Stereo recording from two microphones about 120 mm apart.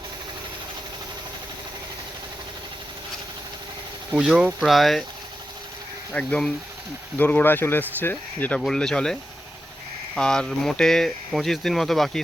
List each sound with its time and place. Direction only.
4.2 s speech: 5° right (ahead or behind)
6.1 s speech: 10° left (ahead or behind)
10.2 s speech: 5° left (ahead or behind)